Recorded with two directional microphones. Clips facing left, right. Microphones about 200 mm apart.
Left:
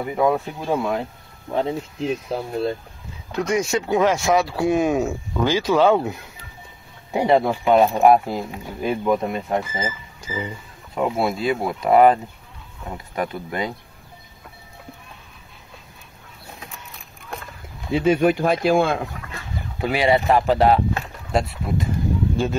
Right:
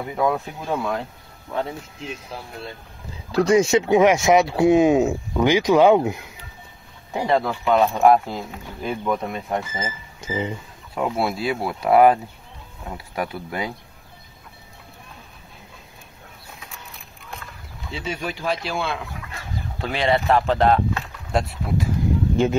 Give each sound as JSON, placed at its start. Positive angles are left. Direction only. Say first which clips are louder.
{"t": 0.1, "sound": "speech", "louder": "left 2 dB", "side_deg": 5}
{"t": 1.5, "sound": "speech", "louder": "left 4 dB", "side_deg": 25}
{"t": 3.3, "sound": "speech", "louder": "right 5 dB", "side_deg": -30}
{"t": 7.1, "sound": "speech", "louder": "left 4 dB", "side_deg": 15}
{"t": 10.2, "sound": "speech", "louder": "right 3 dB", "side_deg": -25}
{"t": 11.0, "sound": "speech", "louder": "left 2 dB", "side_deg": 0}
{"t": 17.9, "sound": "speech", "louder": "left 12 dB", "side_deg": 55}
{"t": 19.8, "sound": "speech", "louder": "left 3 dB", "side_deg": 10}
{"t": 22.4, "sound": "speech", "louder": "right 6 dB", "side_deg": -20}